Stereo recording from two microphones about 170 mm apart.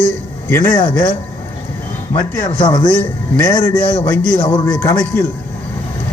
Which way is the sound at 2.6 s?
30° left (ahead or behind).